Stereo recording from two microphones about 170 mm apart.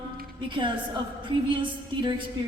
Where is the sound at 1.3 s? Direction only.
30° right (ahead or behind).